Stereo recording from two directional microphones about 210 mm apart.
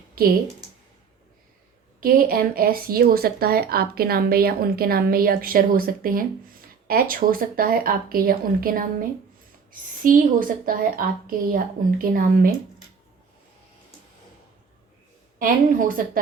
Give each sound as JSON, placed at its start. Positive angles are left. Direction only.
{"t": 0.2, "sound": "speech", "side_deg": -45}
{"t": 2.0, "sound": "a woman's voice", "side_deg": -45}
{"t": 15.4, "sound": "a woman's voice", "side_deg": -40}